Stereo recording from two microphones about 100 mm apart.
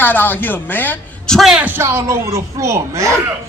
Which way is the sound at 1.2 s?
Centre (ahead or behind).